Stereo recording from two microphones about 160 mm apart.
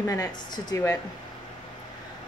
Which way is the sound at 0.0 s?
20° left (ahead or behind).